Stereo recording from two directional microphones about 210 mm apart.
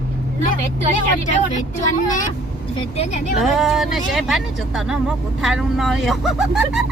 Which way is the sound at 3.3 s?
Centre (ahead or behind).